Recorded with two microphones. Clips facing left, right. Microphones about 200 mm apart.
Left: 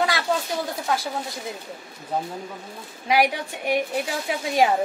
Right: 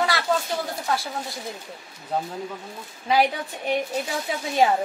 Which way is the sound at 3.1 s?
10° left (ahead or behind).